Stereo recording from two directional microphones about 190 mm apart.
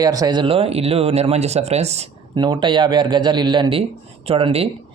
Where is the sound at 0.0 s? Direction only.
20° right (ahead or behind); by 2.0 s 35° right (ahead or behind).